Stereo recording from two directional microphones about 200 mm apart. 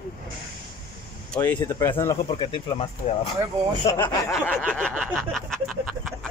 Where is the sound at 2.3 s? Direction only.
25° left (ahead or behind).